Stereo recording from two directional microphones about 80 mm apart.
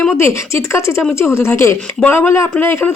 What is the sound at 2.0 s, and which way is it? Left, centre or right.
Speech, left.